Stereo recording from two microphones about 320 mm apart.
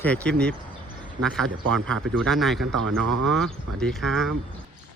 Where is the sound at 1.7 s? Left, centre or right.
Centre.